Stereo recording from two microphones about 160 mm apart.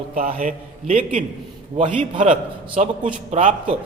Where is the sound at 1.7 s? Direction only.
35° right (ahead or behind).